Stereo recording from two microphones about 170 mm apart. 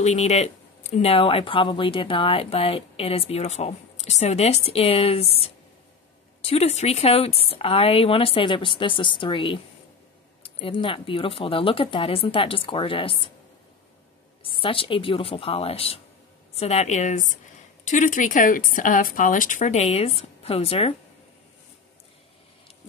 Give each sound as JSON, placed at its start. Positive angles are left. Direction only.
{"t": 0.0, "sound": "speech", "side_deg": 40}
{"t": 14.4, "sound": "speech", "side_deg": 30}